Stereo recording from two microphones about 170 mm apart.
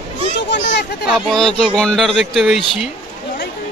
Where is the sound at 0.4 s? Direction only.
90° left.